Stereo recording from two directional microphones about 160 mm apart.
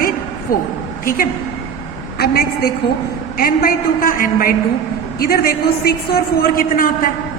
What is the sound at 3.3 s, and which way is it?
A woman's voice, 65° left (ahead or behind).